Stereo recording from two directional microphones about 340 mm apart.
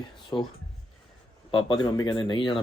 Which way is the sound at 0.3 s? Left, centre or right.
Centre.